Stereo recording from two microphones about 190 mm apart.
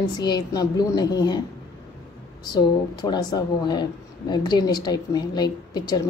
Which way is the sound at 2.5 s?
20° left (ahead or behind).